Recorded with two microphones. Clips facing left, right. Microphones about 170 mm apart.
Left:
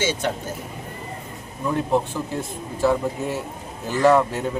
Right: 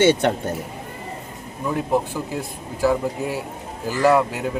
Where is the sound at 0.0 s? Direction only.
60° right (ahead or behind).